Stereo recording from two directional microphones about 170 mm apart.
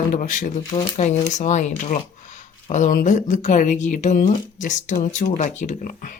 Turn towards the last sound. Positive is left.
turn(degrees=50)  # may be behind; listen again after turning